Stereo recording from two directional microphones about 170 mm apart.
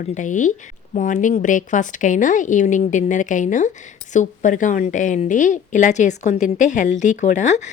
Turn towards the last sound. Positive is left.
turn(degrees=45)  # may be behind; listen again after turning